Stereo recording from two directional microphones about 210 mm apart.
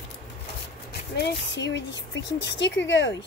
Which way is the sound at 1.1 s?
55° left (ahead or behind).